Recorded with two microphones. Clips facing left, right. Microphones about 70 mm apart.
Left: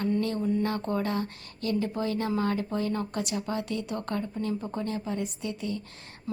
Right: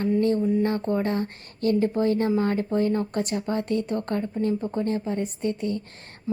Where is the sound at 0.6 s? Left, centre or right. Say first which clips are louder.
Right 5 dB; right.